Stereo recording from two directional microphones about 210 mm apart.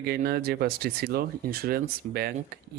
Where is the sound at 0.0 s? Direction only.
45° right (ahead or behind).